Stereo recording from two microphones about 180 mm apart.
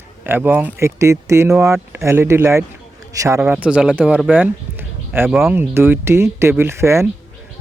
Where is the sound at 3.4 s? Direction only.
5° right (ahead or behind).